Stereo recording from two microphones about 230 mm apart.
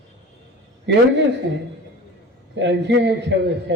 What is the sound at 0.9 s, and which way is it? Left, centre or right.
Speech, right.